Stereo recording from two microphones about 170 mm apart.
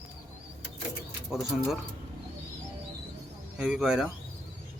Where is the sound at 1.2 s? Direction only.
5° right (ahead or behind).